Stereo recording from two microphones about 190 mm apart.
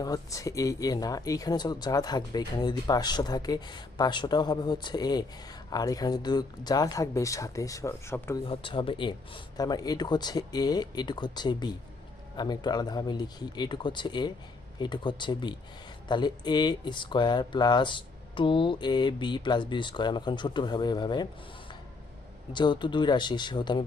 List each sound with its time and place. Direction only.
0.0 s speech: 20° left (ahead or behind)
8.4 s speech: 25° left (ahead or behind)
22.5 s speech: 25° left (ahead or behind)